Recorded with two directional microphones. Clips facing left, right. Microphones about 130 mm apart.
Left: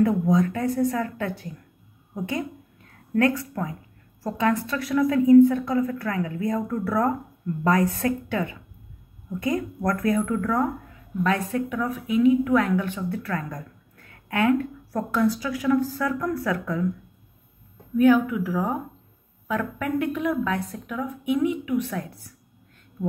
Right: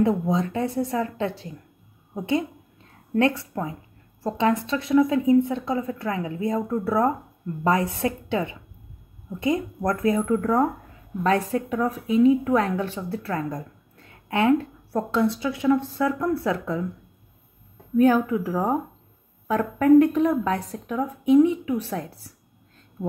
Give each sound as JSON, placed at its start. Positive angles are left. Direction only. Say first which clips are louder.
{"t": 0.0, "sound": "a woman's voice", "louder": "left 2 dB", "side_deg": -25}
{"t": 17.9, "sound": "a woman's voice", "louder": "even", "side_deg": -35}